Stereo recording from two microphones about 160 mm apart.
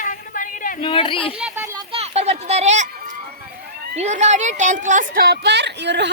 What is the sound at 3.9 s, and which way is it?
A woman's voice, 45° right (ahead or behind).